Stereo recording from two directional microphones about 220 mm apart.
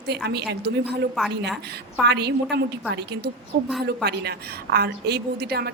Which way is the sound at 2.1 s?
50° right (ahead or behind).